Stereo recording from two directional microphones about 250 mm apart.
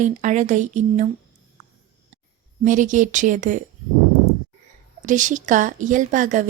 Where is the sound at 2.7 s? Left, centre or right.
Right.